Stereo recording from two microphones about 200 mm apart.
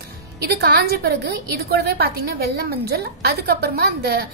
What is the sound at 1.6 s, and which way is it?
A woman's voice, 50° right (ahead or behind).